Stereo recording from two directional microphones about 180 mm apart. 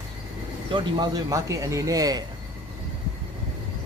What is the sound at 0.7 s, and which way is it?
Speech, 25° right (ahead or behind).